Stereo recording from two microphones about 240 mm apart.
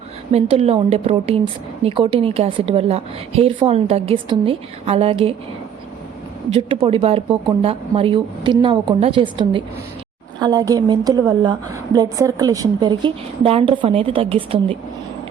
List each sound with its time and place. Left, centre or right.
0.3 s a woman's voice: right
6.5 s a woman's voice: right